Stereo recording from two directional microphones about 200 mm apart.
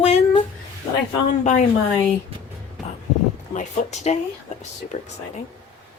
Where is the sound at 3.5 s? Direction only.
35° left (ahead or behind).